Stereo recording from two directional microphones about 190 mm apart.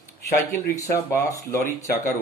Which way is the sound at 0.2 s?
15° left (ahead or behind).